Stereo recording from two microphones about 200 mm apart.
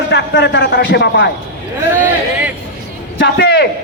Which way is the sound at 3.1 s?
60° left (ahead or behind).